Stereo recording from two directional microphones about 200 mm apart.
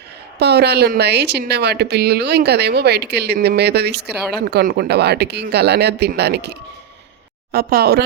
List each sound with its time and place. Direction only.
0.3 s speech: 55° right (ahead or behind)